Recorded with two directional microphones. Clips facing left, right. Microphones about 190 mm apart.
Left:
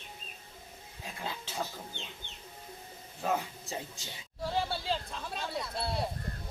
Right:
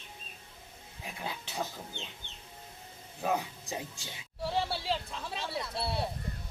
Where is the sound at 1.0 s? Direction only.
15° right (ahead or behind).